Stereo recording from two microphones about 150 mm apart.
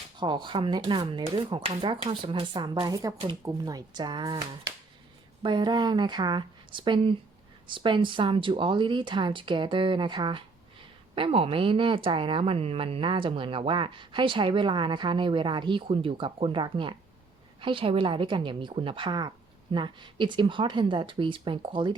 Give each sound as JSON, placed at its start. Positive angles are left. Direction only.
{"t": 0.2, "sound": "speech", "side_deg": -30}